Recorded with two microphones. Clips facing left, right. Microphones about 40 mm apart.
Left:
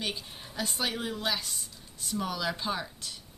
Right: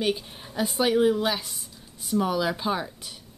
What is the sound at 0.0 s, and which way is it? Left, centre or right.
A woman's voice, centre.